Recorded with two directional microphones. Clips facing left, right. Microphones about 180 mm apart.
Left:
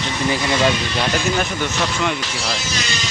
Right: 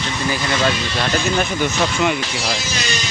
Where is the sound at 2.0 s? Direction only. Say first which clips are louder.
Right 3 dB; 10° right (ahead or behind).